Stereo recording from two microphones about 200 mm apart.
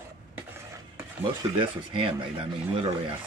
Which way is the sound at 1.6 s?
25° right (ahead or behind).